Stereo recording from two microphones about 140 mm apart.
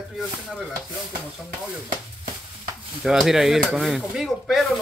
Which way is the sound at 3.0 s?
5° right (ahead or behind).